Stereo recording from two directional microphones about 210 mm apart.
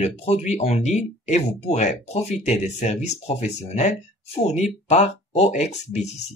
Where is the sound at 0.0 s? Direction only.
30° left (ahead or behind).